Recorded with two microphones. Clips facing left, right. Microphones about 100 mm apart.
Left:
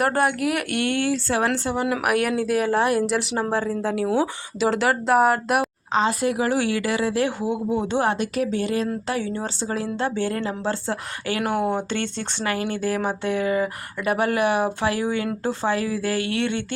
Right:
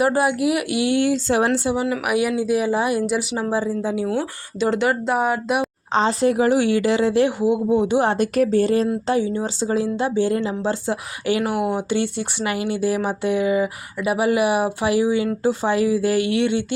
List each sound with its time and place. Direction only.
0.0 s speech: 5° right (ahead or behind)
5.9 s a woman's voice: 30° right (ahead or behind)
8.1 s speech: 40° right (ahead or behind)
9.2 s speech: 15° right (ahead or behind)